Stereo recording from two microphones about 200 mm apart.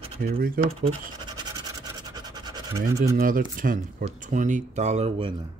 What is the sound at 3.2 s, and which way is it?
Speech, 45° right (ahead or behind).